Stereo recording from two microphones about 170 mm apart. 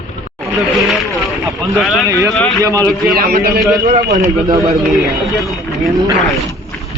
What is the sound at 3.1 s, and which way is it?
Speech, 60° right (ahead or behind).